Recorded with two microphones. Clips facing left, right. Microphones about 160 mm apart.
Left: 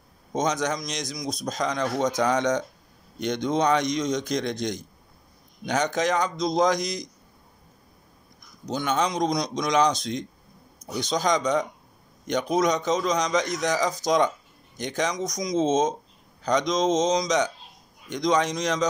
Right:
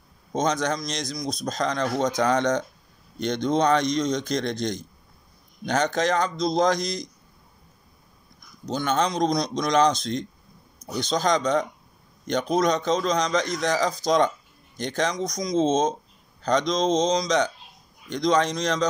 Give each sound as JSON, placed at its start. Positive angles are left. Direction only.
{"t": 0.3, "sound": "speech", "side_deg": 15}
{"t": 8.6, "sound": "speech", "side_deg": 15}